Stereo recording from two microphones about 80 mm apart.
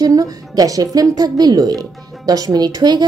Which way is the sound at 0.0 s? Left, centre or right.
Right.